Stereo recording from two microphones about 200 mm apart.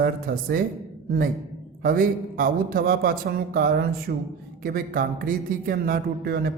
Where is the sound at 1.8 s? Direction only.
45° right (ahead or behind).